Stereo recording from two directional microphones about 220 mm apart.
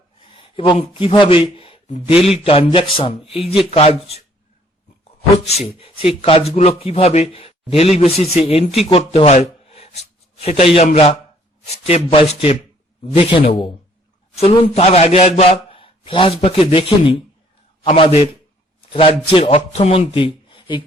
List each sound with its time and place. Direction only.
0.3 s speech: 25° left (ahead or behind)
5.5 s speech: 25° left (ahead or behind)
8.9 s a sound: 25° left (ahead or behind)
10.8 s a man's voice: 25° left (ahead or behind)